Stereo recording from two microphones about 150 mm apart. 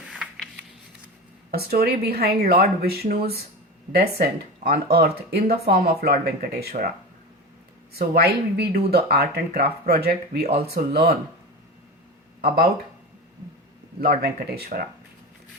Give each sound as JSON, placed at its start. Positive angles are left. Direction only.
{"t": 0.1, "sound": "a sound", "side_deg": -5}
{"t": 1.5, "sound": "speech", "side_deg": -90}
{"t": 7.9, "sound": "speech", "side_deg": -90}
{"t": 12.4, "sound": "speech", "side_deg": -90}
{"t": 14.0, "sound": "speech", "side_deg": -90}